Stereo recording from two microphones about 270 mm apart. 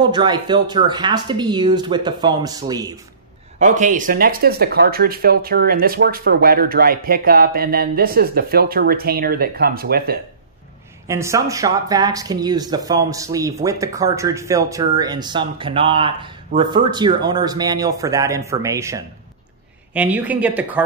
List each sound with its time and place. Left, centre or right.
0.0 s speech: centre
3.5 s speech: right
11.1 s speech: centre